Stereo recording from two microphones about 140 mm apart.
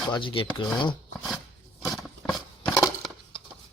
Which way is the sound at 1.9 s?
Centre (ahead or behind).